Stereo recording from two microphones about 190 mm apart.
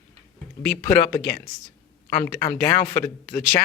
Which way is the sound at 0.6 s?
25° left (ahead or behind).